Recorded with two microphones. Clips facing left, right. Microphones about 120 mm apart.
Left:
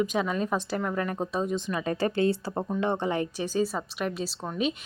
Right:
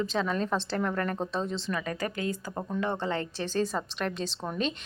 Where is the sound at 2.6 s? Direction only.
20° left (ahead or behind).